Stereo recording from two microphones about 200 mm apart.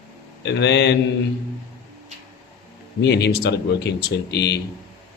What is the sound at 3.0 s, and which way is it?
Speech, 60° left (ahead or behind).